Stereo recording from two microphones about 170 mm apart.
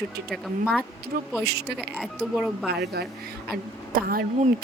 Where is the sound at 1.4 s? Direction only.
75° right (ahead or behind).